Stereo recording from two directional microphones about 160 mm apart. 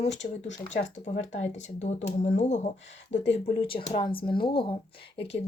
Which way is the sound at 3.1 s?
35° left (ahead or behind).